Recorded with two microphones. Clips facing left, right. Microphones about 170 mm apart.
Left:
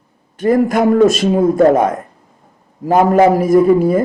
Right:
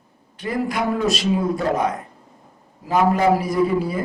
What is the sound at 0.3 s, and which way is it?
Speech, 45° left (ahead or behind).